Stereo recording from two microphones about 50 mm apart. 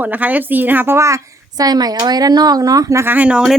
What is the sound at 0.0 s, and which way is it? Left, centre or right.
Speech, right.